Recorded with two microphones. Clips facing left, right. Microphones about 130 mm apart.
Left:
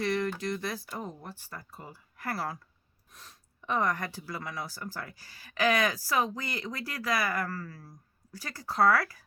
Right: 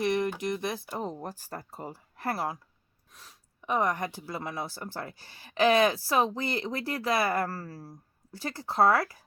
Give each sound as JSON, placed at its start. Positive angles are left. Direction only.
{"t": 0.0, "sound": "speech", "side_deg": -20}
{"t": 0.9, "sound": "speech", "side_deg": -30}
{"t": 3.1, "sound": "speech", "side_deg": -5}